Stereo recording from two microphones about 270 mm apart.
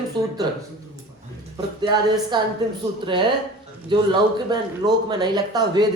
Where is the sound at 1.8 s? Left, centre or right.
Centre.